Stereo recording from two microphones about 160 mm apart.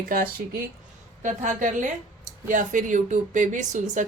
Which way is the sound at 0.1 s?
60° right (ahead or behind).